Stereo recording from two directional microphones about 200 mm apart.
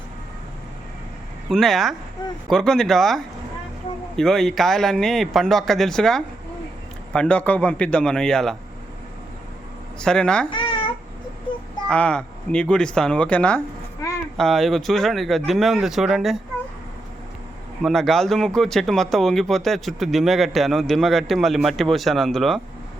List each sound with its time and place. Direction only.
1.5 s speech: centre (ahead or behind)
10.0 s speech: 5° left (ahead or behind)
10.5 s babbling: 25° left (ahead or behind)
11.9 s speech: 5° left (ahead or behind)
17.8 s speech: centre (ahead or behind)